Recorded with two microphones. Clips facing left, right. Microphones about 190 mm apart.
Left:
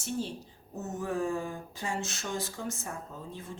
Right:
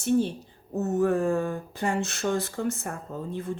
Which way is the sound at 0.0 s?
60° right (ahead or behind).